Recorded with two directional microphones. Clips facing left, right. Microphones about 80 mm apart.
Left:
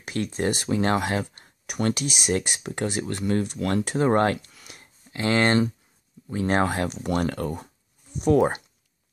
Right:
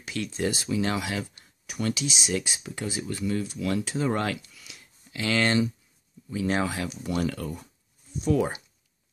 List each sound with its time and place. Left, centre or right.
0.0 s speech: left